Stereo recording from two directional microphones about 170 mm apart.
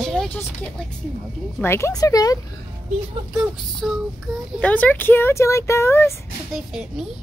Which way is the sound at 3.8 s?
5° right (ahead or behind).